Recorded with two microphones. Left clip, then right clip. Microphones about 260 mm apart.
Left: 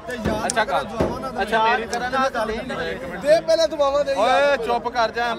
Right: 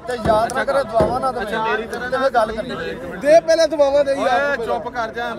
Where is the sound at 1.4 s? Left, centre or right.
Left.